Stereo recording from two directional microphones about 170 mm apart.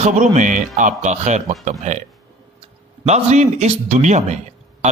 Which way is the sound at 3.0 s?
40° right (ahead or behind).